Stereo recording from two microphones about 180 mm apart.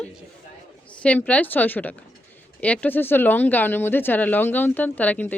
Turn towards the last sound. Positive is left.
turn(degrees=10)  # may be behind; listen again after turning